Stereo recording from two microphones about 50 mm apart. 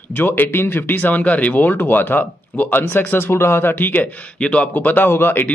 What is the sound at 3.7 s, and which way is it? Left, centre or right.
Speech, left.